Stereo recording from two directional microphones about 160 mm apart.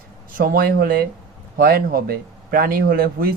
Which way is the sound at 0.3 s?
60° right (ahead or behind).